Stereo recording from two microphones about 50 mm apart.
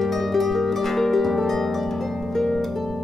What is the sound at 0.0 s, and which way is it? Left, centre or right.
Harp, centre.